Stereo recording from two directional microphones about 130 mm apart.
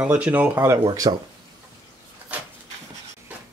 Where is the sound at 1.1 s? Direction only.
45° right (ahead or behind).